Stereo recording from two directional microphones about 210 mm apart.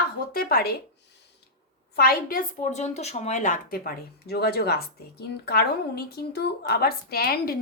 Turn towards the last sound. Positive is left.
turn(degrees=45)  # may be behind; listen again after turning